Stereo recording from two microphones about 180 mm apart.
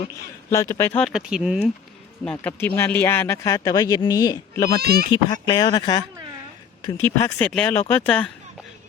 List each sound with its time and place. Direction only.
0.0 s speech: 20° left (ahead or behind)
1.0 s speech: 5° right (ahead or behind)
2.4 s speech: 10° left (ahead or behind)
4.8 s speech: 60° right (ahead or behind)
5.1 s speech: 25° left (ahead or behind); by 8.3 s 5° left (ahead or behind)